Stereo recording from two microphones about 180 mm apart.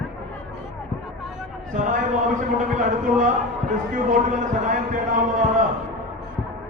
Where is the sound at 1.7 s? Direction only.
45° right (ahead or behind).